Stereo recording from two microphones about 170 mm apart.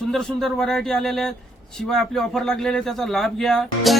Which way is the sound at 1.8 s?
Centre (ahead or behind).